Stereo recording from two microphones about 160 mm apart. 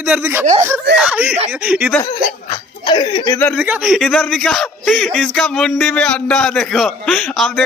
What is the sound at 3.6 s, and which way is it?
Speech, 10° right (ahead or behind).